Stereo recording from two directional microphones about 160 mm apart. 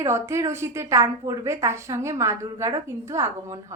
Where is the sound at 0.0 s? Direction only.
15° right (ahead or behind).